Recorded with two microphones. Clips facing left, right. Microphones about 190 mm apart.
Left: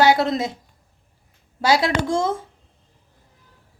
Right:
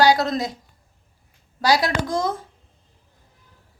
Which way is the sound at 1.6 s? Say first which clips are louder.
Left 1 dB; 25° left (ahead or behind).